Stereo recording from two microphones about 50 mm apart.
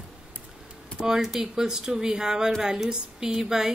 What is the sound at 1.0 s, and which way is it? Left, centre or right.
A woman's voice, centre.